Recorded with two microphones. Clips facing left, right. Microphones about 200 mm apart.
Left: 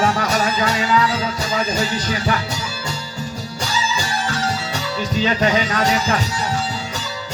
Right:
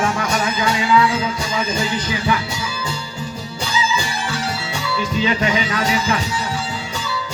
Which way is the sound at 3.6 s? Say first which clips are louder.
Right 2 dB; 40° left (ahead or behind).